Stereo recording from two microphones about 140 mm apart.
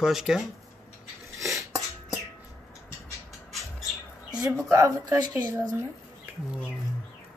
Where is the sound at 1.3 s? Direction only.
20° right (ahead or behind).